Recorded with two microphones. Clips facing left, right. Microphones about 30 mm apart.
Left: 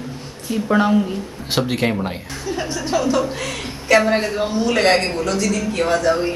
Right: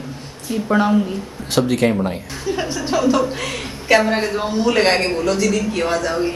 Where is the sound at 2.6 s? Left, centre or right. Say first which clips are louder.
Right 2 dB; centre.